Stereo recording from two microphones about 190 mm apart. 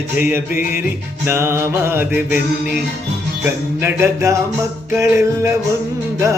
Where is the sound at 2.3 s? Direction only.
45° left (ahead or behind).